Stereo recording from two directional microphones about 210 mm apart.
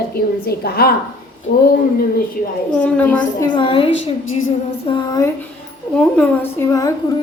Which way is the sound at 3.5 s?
25° left (ahead or behind).